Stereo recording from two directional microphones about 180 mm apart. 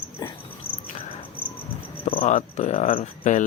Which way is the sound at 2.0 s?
30° left (ahead or behind).